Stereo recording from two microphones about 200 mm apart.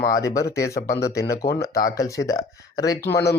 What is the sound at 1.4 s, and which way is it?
Speech, 55° left (ahead or behind).